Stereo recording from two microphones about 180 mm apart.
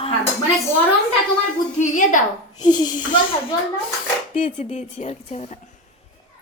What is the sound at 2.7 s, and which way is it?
Speech, 25° left (ahead or behind).